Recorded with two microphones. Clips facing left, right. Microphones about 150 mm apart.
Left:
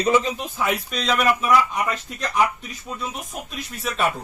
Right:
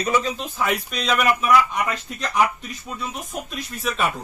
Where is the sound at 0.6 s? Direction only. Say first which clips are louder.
Even; centre (ahead or behind).